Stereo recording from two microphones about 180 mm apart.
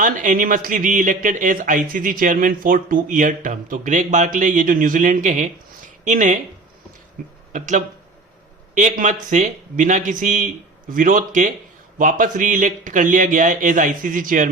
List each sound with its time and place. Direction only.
0.0 s speech: 45° right (ahead or behind)
7.5 s a man's voice: 40° right (ahead or behind)